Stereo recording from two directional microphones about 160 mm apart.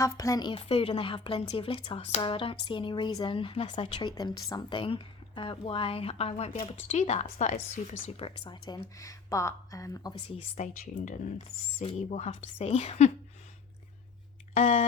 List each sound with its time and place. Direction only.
0.0 s a woman's voice: 20° left (ahead or behind)
10.8 s speech: 55° left (ahead or behind)
14.5 s speech: 45° left (ahead or behind)